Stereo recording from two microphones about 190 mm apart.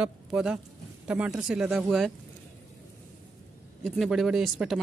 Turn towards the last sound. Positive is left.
turn(degrees=0)  # may be behind; listen again after turning